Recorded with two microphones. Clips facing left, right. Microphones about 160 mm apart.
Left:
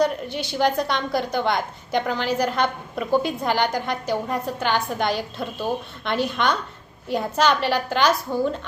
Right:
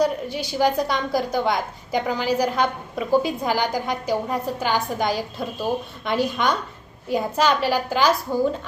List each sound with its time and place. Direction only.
0.0 s a woman's voice: 10° right (ahead or behind)